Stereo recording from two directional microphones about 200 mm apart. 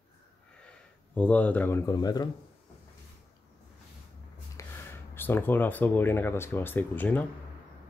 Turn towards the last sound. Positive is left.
turn(degrees=10)  # may be behind; listen again after turning